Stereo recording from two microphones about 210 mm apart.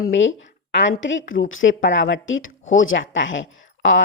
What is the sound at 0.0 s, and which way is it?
A woman's voice, 65° left (ahead or behind).